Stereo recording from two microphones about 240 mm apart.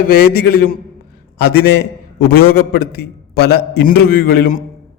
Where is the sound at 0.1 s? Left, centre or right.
Left.